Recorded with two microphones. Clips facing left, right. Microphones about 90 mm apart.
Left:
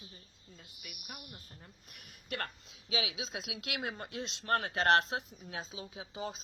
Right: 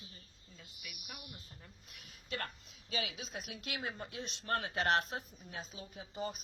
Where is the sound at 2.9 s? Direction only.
90° left.